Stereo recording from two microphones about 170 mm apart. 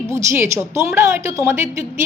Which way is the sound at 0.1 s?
15° right (ahead or behind).